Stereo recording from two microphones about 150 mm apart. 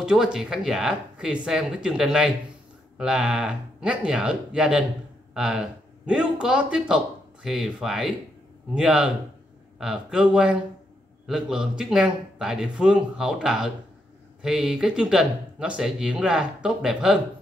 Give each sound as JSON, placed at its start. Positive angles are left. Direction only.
{"t": 0.0, "sound": "a man's voice", "side_deg": -5}